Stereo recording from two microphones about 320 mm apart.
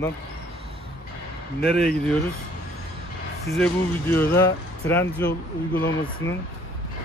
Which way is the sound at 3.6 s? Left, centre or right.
Centre.